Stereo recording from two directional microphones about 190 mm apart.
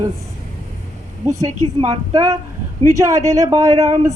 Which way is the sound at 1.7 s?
25° right (ahead or behind).